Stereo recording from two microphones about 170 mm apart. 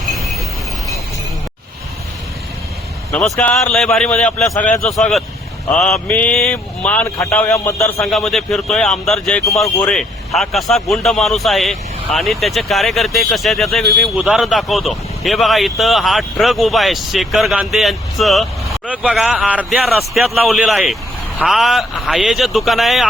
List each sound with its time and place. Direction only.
3.1 s speech: centre (ahead or behind)
7.9 s speech: centre (ahead or behind)